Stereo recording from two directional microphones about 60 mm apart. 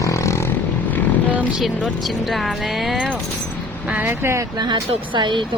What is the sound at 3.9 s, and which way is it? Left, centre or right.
Speech, right.